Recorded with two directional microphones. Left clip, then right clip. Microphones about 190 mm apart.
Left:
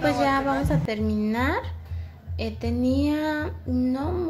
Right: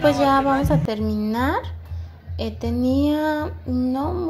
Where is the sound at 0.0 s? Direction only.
15° right (ahead or behind).